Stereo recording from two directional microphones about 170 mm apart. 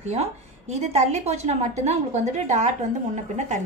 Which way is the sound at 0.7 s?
40° right (ahead or behind).